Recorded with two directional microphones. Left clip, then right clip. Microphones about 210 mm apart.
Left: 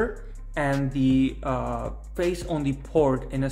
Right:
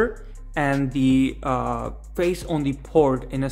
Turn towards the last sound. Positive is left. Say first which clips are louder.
# right 3 dB
turn(degrees=-20)  # may be behind; listen again after turning